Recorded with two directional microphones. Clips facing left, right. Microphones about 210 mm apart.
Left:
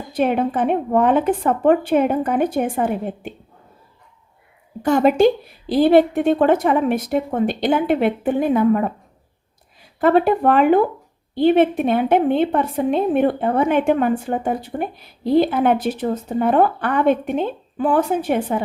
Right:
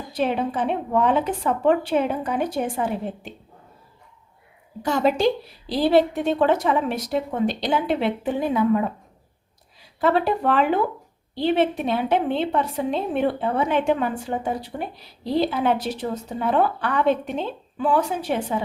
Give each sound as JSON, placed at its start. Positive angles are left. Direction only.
{"t": 0.1, "sound": "a woman's voice", "side_deg": 55}
{"t": 4.8, "sound": "a woman's voice", "side_deg": 55}
{"t": 10.0, "sound": "a woman's voice", "side_deg": 50}